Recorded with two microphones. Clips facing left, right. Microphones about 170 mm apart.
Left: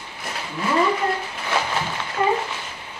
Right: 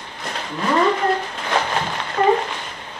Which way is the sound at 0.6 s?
55° right (ahead or behind).